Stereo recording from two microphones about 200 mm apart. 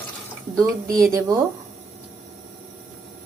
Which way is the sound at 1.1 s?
15° right (ahead or behind).